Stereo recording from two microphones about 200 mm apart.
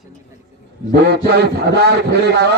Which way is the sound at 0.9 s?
55° right (ahead or behind).